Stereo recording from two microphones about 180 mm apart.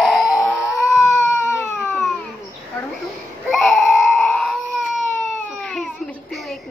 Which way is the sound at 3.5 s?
Centre (ahead or behind).